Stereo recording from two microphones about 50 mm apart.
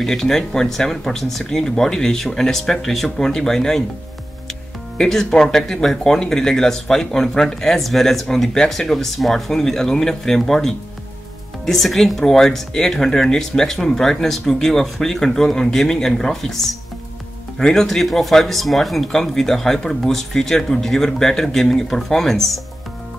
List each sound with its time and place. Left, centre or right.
0.0 s speech: centre
4.9 s speech: centre